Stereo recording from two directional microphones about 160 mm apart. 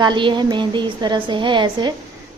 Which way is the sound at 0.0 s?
30° right (ahead or behind).